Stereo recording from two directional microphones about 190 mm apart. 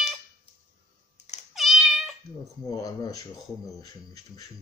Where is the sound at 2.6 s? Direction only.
20° left (ahead or behind).